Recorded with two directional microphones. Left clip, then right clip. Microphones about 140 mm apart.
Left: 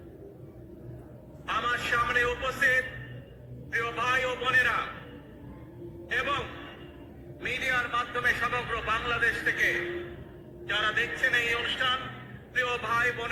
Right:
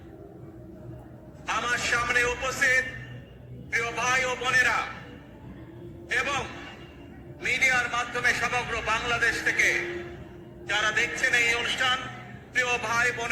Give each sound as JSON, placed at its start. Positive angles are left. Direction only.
{"t": 1.5, "sound": "a man's voice", "side_deg": -20}
{"t": 6.1, "sound": "a man's voice", "side_deg": -20}